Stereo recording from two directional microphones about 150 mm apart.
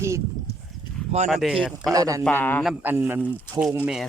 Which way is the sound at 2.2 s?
15° left (ahead or behind).